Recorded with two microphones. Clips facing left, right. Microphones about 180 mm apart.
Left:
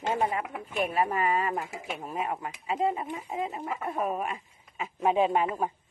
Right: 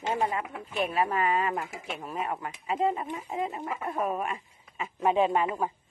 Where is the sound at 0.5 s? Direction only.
10° left (ahead or behind).